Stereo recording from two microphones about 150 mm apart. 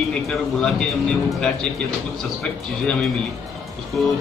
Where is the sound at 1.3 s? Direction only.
Centre (ahead or behind).